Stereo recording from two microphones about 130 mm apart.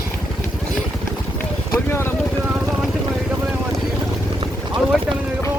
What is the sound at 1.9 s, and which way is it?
Speech, 15° left (ahead or behind).